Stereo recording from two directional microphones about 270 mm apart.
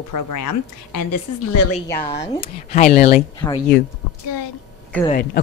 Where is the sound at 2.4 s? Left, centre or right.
Left.